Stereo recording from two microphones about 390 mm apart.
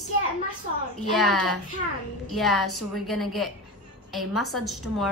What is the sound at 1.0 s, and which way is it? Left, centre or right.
Speech, left.